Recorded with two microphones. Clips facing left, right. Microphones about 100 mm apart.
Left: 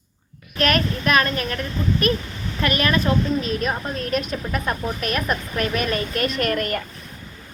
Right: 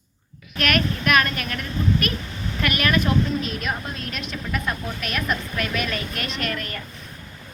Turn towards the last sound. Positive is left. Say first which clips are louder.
# left 6 dB
turn(degrees=50)  # may be behind; listen again after turning